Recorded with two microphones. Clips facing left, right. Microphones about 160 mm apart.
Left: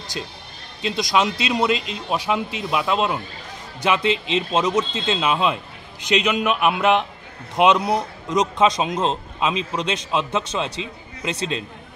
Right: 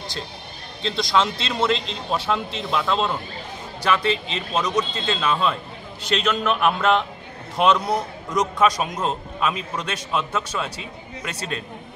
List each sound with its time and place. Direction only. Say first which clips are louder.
0.8 s speech: left 1 dB; 15° left (ahead or behind)
3.8 s a man's voice: left 1 dB; 20° left (ahead or behind)